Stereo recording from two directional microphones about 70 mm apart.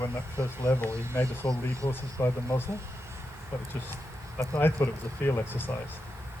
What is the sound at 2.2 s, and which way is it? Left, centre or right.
Speech, left.